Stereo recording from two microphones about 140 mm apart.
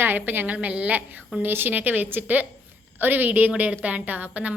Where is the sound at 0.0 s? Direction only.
15° right (ahead or behind).